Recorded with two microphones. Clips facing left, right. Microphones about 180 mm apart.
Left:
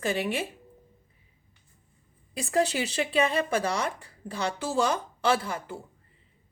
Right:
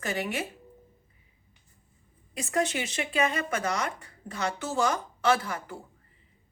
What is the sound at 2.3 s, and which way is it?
A woman's voice, 30° left (ahead or behind).